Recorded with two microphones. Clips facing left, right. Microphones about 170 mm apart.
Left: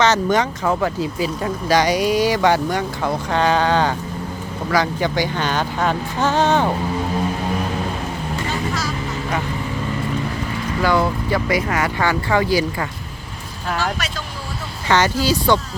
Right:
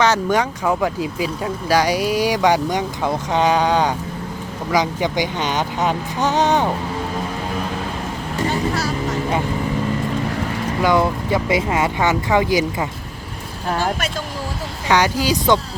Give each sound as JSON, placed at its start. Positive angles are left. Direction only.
{"t": 0.0, "sound": "speech", "side_deg": -10}
{"t": 10.8, "sound": "speech", "side_deg": -20}
{"t": 14.8, "sound": "speech", "side_deg": -10}